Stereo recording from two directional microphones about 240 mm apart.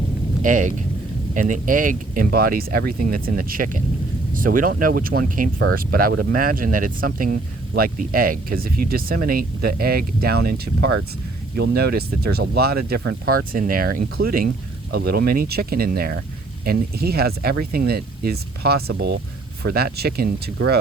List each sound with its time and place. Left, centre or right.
0.4 s speech: right